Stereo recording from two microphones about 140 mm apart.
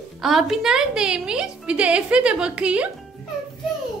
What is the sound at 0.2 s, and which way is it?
A woman's voice, centre (ahead or behind).